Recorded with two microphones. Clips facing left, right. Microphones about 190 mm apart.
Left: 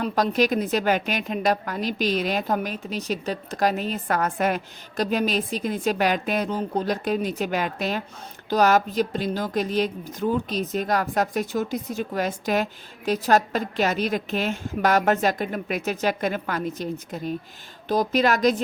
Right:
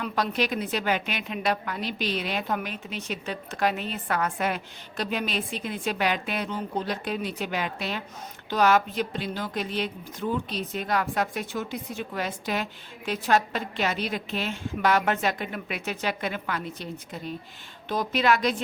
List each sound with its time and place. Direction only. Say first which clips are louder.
0.0 s a woman's voice: left 5 dB; 40° left (ahead or behind)